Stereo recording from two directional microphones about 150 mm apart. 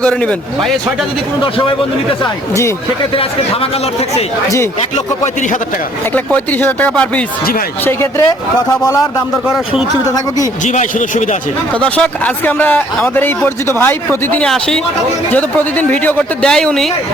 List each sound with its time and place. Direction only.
0.0 s speech: 10° left (ahead or behind)
1.4 s a man's voice: 35° left (ahead or behind)
3.2 s a man's voice: 40° left (ahead or behind)
6.1 s speech: 10° left (ahead or behind)
7.9 s speech: 20° left (ahead or behind)
10.6 s a man's voice: 55° left (ahead or behind)
11.7 s speech: 10° left (ahead or behind)